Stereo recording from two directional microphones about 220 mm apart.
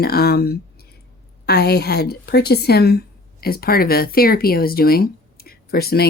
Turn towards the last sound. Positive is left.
turn(degrees=45)  # may be behind; listen again after turning